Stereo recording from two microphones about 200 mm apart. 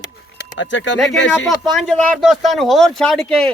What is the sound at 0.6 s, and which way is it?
Speech, 70° left (ahead or behind).